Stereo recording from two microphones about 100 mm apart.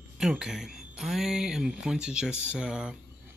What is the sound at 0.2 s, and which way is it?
Speech, 5° right (ahead or behind).